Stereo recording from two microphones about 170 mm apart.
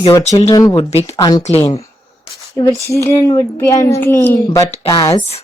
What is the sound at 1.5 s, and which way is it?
Speech, 35° left (ahead or behind).